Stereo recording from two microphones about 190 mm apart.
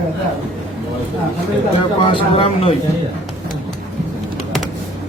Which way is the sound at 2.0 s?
30° left (ahead or behind).